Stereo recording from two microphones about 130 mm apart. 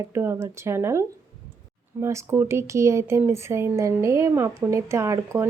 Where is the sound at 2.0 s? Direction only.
20° right (ahead or behind).